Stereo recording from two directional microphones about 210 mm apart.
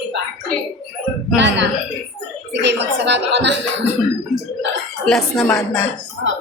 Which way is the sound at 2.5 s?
55° right (ahead or behind).